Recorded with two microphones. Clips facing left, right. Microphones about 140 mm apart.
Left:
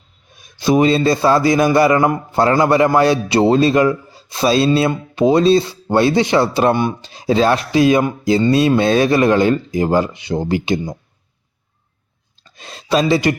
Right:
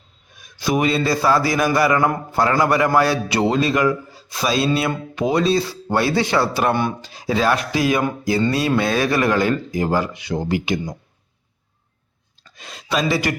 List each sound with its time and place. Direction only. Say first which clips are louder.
0.4 s a man's voice: left 6 dB; 25° left (ahead or behind)
12.4 s speech: left 3 dB; 30° left (ahead or behind)